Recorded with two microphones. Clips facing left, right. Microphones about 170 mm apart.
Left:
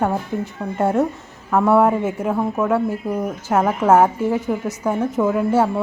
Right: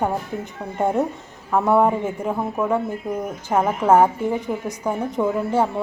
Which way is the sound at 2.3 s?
10° right (ahead or behind).